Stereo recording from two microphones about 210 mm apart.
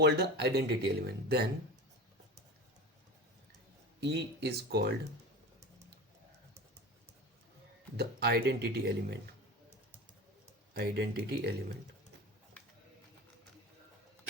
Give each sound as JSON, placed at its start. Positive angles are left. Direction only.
{"t": 0.0, "sound": "speech", "side_deg": -50}
{"t": 4.0, "sound": "speech", "side_deg": -55}
{"t": 7.9, "sound": "speech", "side_deg": -50}
{"t": 10.8, "sound": "speech", "side_deg": -50}